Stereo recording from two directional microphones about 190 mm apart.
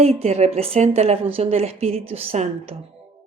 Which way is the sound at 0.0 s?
30° right (ahead or behind).